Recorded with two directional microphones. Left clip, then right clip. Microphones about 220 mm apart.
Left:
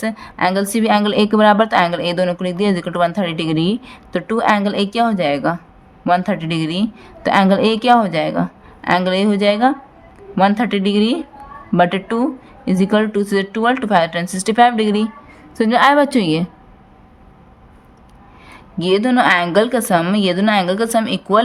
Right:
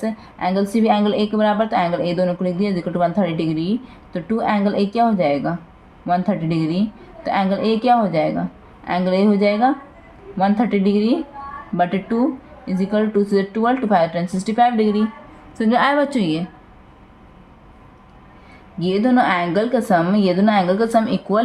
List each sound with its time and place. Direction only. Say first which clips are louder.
0.0 s speech: left 5 dB; 40° left (ahead or behind)
18.8 s speech: left 3 dB; 40° left (ahead or behind)